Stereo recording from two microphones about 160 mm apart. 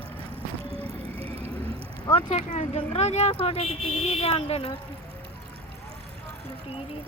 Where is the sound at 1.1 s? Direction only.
35° right (ahead or behind).